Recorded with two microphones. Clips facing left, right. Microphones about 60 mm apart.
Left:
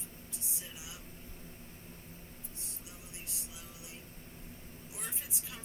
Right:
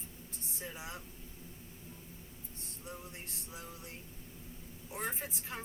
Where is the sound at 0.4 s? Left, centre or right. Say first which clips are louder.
Right 8 dB; right.